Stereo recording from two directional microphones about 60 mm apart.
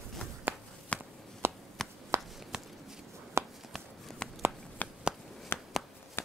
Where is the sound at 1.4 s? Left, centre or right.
Right.